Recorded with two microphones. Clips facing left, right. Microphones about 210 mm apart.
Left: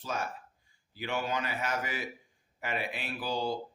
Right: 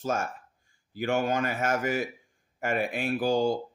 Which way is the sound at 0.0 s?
45° right (ahead or behind).